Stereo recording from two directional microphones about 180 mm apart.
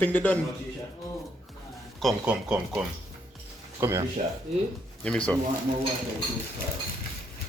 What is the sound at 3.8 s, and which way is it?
Speech, 15° right (ahead or behind).